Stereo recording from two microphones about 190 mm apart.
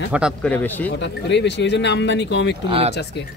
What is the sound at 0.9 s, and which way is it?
Speech, 65° left (ahead or behind).